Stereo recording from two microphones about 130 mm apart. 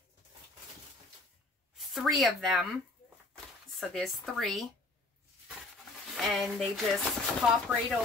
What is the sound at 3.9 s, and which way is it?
Speech, centre (ahead or behind).